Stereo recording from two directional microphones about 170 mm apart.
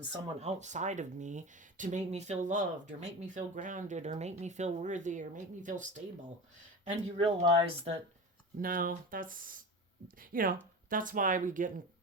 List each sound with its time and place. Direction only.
0.3 s speech: 40° right (ahead or behind)
6.8 s speech: 35° right (ahead or behind)
8.6 s speech: 55° right (ahead or behind)